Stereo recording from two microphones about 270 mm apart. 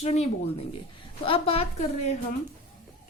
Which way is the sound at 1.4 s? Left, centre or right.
Left.